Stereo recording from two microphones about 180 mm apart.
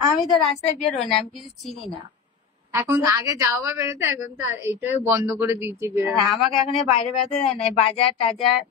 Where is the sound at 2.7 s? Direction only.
15° right (ahead or behind).